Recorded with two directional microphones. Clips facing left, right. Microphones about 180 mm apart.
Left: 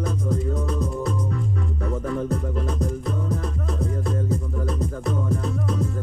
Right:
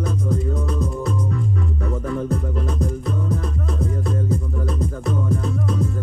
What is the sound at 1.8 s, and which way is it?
Music, 40° left (ahead or behind).